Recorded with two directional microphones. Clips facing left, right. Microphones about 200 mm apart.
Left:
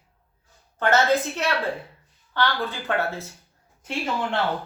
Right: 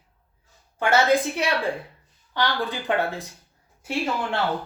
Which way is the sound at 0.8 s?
10° right (ahead or behind).